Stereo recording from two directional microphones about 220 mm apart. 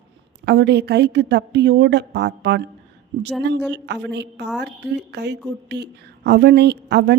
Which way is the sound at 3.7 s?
50° right (ahead or behind).